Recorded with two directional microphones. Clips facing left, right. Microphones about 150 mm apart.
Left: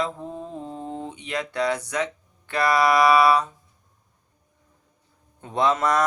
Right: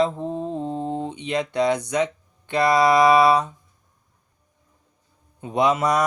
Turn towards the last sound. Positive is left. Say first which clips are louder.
# right 2 dB
turn(degrees=-10)  # may be behind; listen again after turning